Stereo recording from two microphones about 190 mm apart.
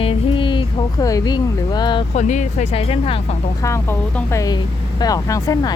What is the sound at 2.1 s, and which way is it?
Speech, 40° left (ahead or behind).